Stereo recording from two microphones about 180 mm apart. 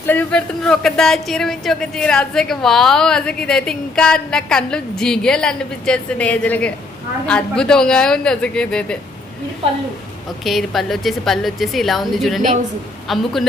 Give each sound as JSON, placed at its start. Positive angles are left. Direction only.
{"t": 0.1, "sound": "speech", "side_deg": 10}
{"t": 10.4, "sound": "speech", "side_deg": 0}